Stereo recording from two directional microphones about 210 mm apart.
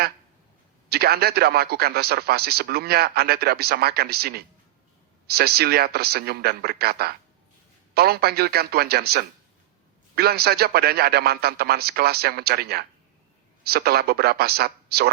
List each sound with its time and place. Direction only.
0.9 s a man's voice: 50° right (ahead or behind)